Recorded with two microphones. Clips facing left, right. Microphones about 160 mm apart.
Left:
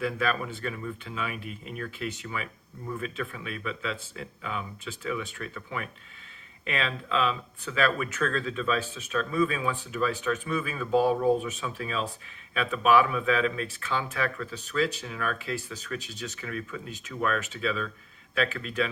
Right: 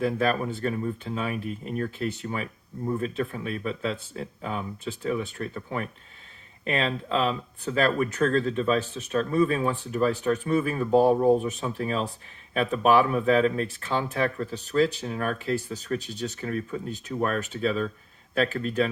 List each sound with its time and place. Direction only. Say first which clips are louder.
0.0 s speech: right 4 dB; 40° right (ahead or behind)